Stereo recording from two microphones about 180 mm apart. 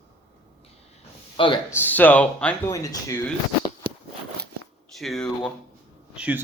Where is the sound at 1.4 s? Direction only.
30° left (ahead or behind).